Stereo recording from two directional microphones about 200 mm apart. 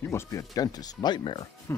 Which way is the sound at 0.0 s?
15° left (ahead or behind).